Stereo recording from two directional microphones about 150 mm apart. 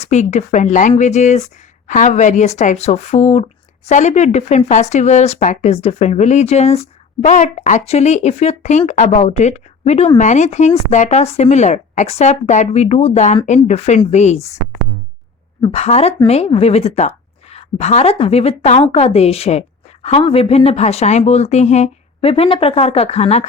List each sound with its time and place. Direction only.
0.0 s speech: 50° left (ahead or behind)
15.6 s speech: 40° left (ahead or behind)